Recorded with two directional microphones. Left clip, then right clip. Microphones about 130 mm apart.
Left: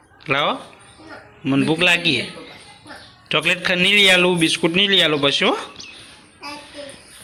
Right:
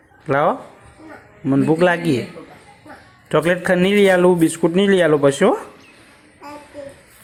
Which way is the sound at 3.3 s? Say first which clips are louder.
Right 2 dB; 30° right (ahead or behind).